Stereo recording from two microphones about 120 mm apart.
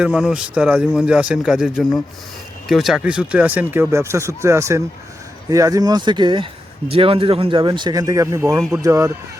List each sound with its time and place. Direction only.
0.0 s speech: 5° right (ahead or behind); by 9.1 s 25° right (ahead or behind)